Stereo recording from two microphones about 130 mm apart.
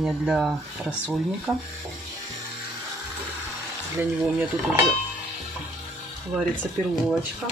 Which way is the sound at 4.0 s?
15° right (ahead or behind).